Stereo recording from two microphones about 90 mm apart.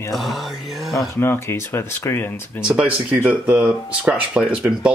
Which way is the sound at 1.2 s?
25° left (ahead or behind).